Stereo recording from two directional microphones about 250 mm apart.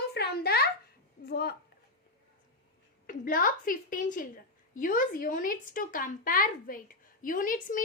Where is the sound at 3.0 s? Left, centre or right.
Left.